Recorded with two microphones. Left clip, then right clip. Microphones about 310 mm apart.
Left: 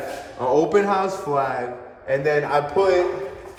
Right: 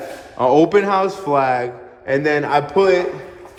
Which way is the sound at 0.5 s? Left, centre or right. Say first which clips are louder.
Right 3 dB; centre.